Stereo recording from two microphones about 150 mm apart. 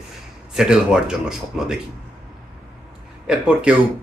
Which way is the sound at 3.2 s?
5° right (ahead or behind).